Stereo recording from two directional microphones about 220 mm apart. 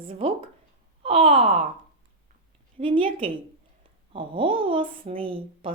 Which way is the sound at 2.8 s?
25° right (ahead or behind).